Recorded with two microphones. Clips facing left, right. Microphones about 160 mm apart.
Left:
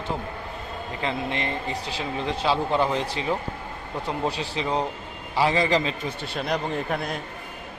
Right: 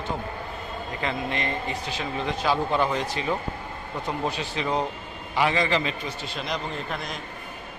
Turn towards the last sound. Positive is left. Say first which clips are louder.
# left 5 dB
turn(degrees=60)  # may be behind; listen again after turning